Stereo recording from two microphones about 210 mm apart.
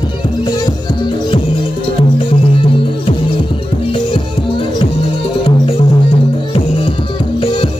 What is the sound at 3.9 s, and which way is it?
Music, 25° left (ahead or behind).